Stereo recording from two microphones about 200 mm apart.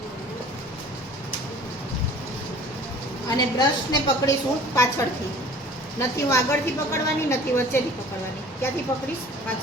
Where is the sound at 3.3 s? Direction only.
20° left (ahead or behind).